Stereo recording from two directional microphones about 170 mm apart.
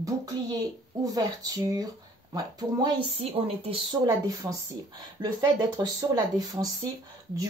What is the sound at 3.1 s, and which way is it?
Speech, 35° right (ahead or behind).